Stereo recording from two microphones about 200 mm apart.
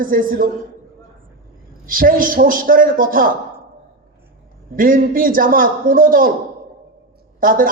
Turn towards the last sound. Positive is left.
turn(degrees=-45)  # may be behind; listen again after turning